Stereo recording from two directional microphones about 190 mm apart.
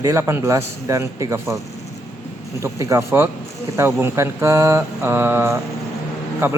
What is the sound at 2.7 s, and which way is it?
Speech, 15° right (ahead or behind).